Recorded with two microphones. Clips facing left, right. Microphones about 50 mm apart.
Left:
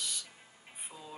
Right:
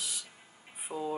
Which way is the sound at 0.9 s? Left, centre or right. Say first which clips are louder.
Right 14 dB; right.